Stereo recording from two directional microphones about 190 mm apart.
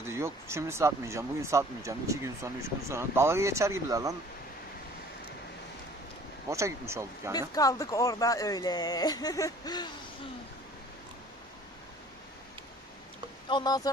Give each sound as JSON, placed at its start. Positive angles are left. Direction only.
{"t": 0.1, "sound": "speech", "side_deg": -15}
{"t": 6.5, "sound": "speech", "side_deg": -15}
{"t": 7.3, "sound": "speech", "side_deg": 20}
{"t": 13.5, "sound": "speech", "side_deg": 20}